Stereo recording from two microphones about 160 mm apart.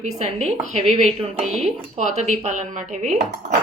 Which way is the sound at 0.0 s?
45° right (ahead or behind).